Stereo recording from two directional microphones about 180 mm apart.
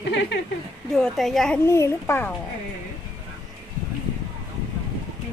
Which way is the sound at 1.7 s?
15° left (ahead or behind).